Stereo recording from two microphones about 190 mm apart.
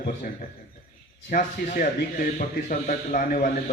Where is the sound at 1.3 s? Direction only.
45° left (ahead or behind).